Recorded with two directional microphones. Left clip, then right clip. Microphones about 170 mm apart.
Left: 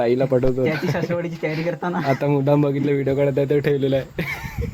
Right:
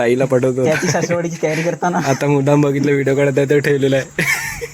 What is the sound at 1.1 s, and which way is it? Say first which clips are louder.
Speech: right 6 dB; 35° right (ahead or behind).